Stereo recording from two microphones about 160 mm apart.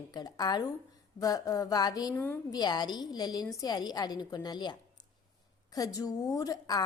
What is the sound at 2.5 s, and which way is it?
A woman's voice, 25° left (ahead or behind).